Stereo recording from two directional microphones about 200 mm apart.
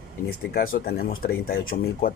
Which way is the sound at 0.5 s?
45° left (ahead or behind).